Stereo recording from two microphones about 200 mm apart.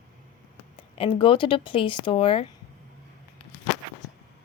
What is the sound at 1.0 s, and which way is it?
A woman's voice, 25° left (ahead or behind).